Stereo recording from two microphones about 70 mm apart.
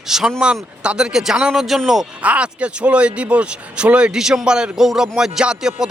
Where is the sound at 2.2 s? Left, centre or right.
Centre.